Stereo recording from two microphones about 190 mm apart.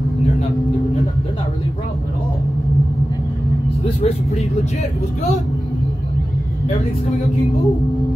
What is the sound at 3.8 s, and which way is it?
Speech, 35° left (ahead or behind).